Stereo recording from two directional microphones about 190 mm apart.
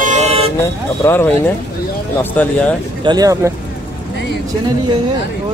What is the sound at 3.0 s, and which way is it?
Speech, 20° right (ahead or behind).